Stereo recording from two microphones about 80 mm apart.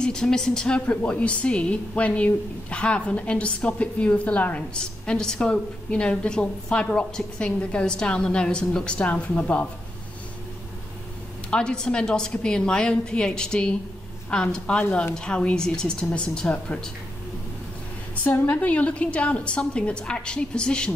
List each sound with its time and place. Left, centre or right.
0.0 s a woman's voice: centre
11.5 s a woman's voice: centre
18.1 s a sound: centre
18.5 s a woman's voice: centre